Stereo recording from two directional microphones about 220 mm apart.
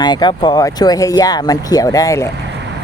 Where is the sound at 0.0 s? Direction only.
20° left (ahead or behind).